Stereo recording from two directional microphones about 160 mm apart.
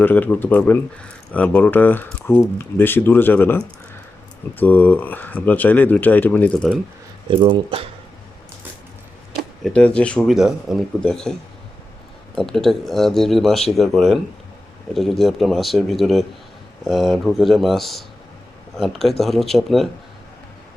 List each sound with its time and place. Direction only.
0.0 s speech: 10° left (ahead or behind)
7.3 s speech: 30° right (ahead or behind)
9.6 s speech: 10° left (ahead or behind)
12.4 s speech: centre (ahead or behind)